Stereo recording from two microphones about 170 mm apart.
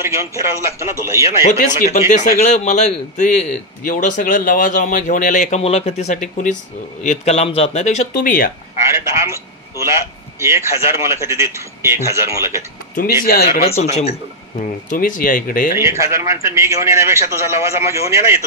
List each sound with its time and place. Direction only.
0.0 s speech: 15° right (ahead or behind)
1.9 s a man's voice: 40° left (ahead or behind)
8.8 s a sound: 15° right (ahead or behind)
10.4 s speech: 15° right (ahead or behind)
13.2 s speech: 60° left (ahead or behind)
13.7 s speech: 40° left (ahead or behind)
14.6 s a man's voice: 50° left (ahead or behind)
15.8 s speech: 15° right (ahead or behind)